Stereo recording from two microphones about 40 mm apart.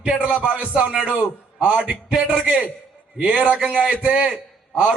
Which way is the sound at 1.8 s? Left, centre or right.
Right.